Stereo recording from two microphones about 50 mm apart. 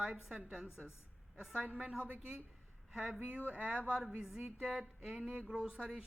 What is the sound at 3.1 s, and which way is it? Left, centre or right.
Speech, right.